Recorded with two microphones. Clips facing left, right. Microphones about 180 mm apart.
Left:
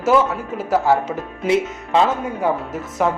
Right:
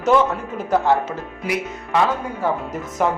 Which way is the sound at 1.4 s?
25° left (ahead or behind).